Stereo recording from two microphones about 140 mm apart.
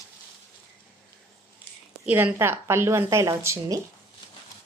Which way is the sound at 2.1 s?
15° right (ahead or behind).